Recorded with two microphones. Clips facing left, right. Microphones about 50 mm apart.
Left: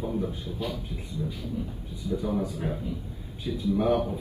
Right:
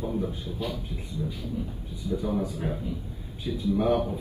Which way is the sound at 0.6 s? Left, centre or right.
Left.